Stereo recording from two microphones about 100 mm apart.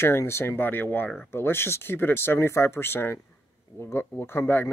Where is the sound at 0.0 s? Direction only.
25° left (ahead or behind).